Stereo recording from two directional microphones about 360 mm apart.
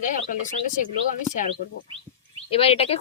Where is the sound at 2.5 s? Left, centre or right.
Centre.